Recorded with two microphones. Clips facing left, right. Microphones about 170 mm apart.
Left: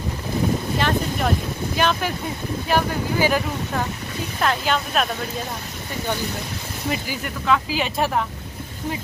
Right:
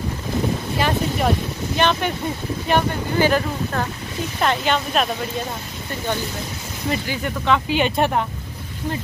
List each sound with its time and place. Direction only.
0.7 s boat: 5° right (ahead or behind)
1.8 s speech: centre (ahead or behind)
6.9 s speech: 5° left (ahead or behind)